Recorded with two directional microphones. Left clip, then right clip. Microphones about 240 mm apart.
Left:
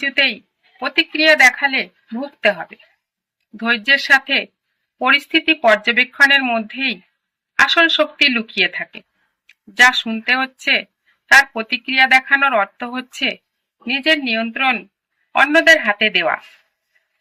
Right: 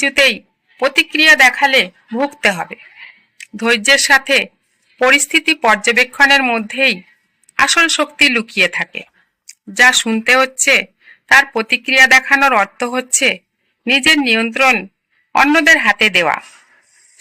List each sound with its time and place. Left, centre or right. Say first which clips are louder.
0.8 s speech: right 4 dB; right